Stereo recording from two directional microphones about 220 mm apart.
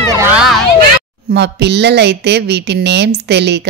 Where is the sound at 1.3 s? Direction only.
50° right (ahead or behind).